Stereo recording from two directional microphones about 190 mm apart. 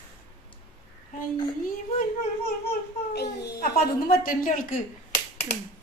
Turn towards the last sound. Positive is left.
turn(degrees=35)  # may be behind; listen again after turning